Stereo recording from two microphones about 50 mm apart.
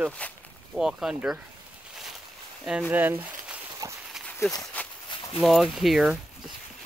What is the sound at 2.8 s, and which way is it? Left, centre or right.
Speech, right.